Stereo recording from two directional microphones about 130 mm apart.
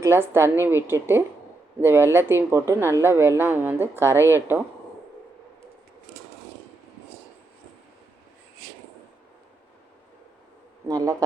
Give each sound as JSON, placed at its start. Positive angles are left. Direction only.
{"t": 0.0, "sound": "speech", "side_deg": -20}
{"t": 10.8, "sound": "speech", "side_deg": -25}